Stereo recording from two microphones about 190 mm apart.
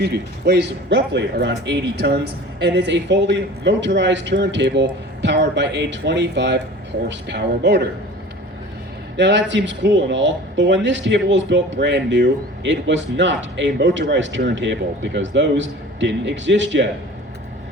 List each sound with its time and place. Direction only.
0.0 s speech: 60° right (ahead or behind)
9.1 s speech: 65° right (ahead or behind)